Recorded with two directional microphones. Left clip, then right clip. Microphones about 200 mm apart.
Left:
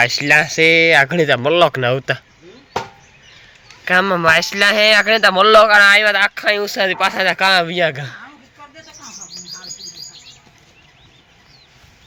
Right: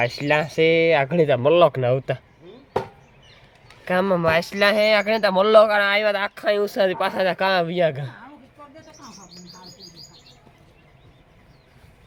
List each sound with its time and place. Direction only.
0.0 s speech: centre (ahead or behind)
3.8 s a man's voice: 10° right (ahead or behind)